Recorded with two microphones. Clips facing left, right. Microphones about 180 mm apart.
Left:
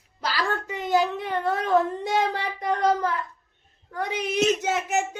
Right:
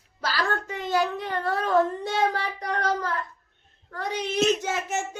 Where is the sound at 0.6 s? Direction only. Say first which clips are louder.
Left 2 dB; 15° left (ahead or behind).